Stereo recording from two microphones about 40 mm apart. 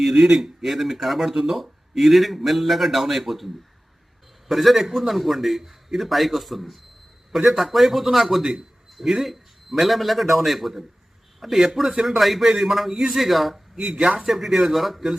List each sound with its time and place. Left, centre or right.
0.0 s a man's voice: centre
13.7 s speech: right
14.3 s a man's voice: centre